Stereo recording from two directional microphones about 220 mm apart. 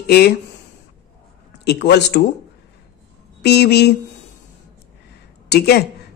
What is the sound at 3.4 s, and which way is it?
Speech, 50° left (ahead or behind).